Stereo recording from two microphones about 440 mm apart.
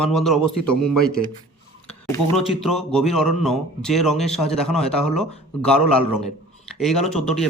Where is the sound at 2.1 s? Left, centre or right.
Centre.